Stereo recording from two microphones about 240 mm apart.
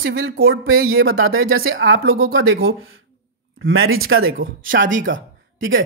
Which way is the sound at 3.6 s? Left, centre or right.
Right.